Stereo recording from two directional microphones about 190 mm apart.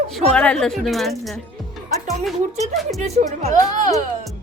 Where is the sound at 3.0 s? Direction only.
35° right (ahead or behind).